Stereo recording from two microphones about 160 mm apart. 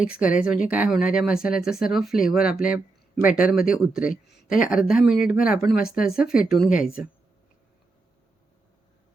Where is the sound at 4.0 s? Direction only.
60° left (ahead or behind).